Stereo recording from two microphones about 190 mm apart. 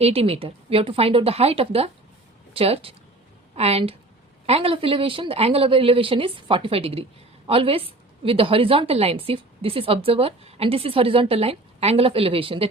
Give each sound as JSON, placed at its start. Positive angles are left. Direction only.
{"t": 0.0, "sound": "a woman's voice", "side_deg": -30}